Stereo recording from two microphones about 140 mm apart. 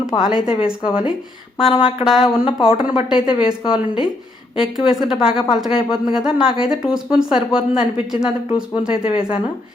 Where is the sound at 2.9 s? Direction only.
5° right (ahead or behind).